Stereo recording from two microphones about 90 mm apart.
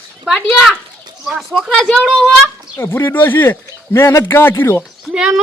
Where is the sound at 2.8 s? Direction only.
25° left (ahead or behind).